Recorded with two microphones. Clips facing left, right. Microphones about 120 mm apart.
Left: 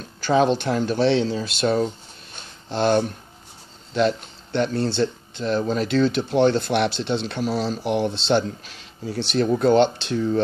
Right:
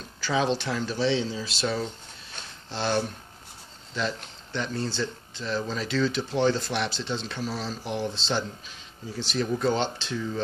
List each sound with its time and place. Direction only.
0.2 s speech: 50° left (ahead or behind)
3.9 s speech: 65° left (ahead or behind)